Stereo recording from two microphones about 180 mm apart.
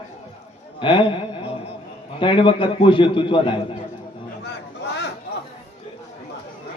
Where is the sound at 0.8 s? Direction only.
30° left (ahead or behind).